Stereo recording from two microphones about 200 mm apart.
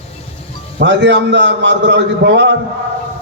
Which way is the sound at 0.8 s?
65° right (ahead or behind).